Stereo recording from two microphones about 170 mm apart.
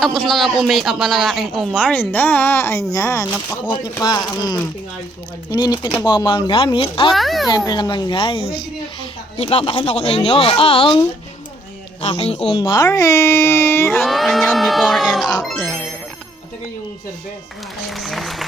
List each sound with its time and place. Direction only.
0.0 s speech: centre (ahead or behind); by 7.1 s 30° left (ahead or behind)
7.1 s speech: centre (ahead or behind)
7.4 s speech: 25° left (ahead or behind)
12.0 s speech: 40° left (ahead or behind); by 14.0 s 15° left (ahead or behind)
14.0 s speech: centre (ahead or behind)
17.8 s applause: centre (ahead or behind)